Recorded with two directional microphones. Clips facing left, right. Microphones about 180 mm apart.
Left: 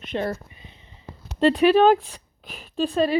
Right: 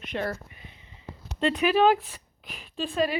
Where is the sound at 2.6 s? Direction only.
40° left (ahead or behind).